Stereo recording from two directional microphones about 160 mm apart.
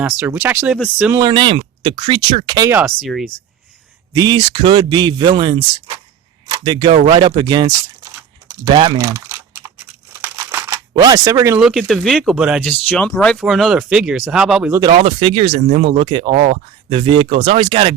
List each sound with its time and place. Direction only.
0.0 s speech: 10° right (ahead or behind)
1.1 s speech: 25° right (ahead or behind)
2.6 s speech: 15° right (ahead or behind)
3.0 s speech: centre (ahead or behind)
4.1 s speech: 25° right (ahead or behind)
9.0 s crumpling: 20° right (ahead or behind)
10.9 s speech: 25° right (ahead or behind)
11.6 s speech: centre (ahead or behind)
12.9 s speech: 5° left (ahead or behind)
14.7 s speech: 25° right (ahead or behind)
15.0 s speech: 35° right (ahead or behind)